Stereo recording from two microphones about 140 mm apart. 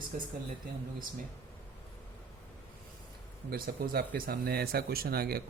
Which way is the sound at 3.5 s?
90° right.